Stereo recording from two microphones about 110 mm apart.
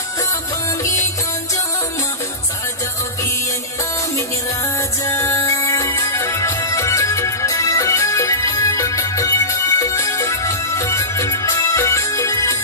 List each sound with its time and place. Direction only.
5.0 s music: 30° left (ahead or behind)